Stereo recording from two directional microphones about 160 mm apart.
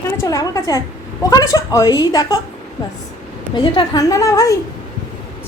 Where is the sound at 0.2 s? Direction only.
20° left (ahead or behind).